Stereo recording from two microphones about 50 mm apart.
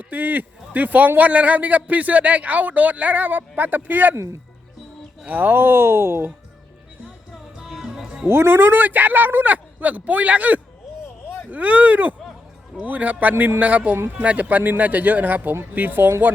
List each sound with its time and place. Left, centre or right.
0.1 s a man's voice: right
4.1 s speech: right
5.2 s speech: right
7.6 s music: centre
8.3 s a man's voice: right